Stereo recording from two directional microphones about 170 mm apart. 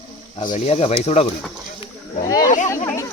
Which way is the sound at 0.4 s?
40° left (ahead or behind).